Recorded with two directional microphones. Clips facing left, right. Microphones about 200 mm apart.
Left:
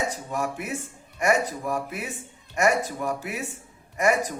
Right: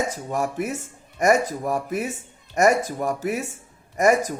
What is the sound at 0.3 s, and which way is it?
A man's voice, 40° right (ahead or behind).